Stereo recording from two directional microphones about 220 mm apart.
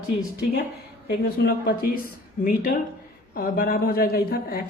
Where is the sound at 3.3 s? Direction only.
40° left (ahead or behind).